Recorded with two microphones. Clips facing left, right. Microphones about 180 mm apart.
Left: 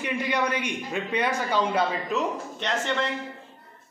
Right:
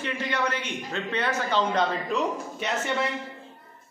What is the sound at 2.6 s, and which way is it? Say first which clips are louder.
Speech: left 1 dB; 10° right (ahead or behind).